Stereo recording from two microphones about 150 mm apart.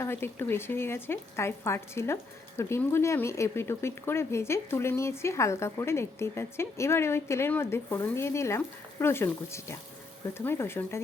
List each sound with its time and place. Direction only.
0.0 s speech: 15° left (ahead or behind)